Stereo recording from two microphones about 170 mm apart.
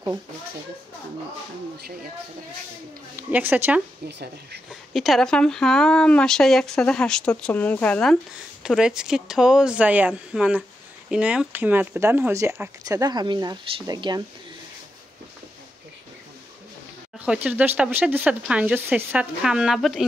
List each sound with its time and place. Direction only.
3.2 s speech: 10° right (ahead or behind)
4.6 s speech: centre (ahead or behind); by 14.2 s 25° right (ahead or behind)
17.2 s speech: 10° right (ahead or behind)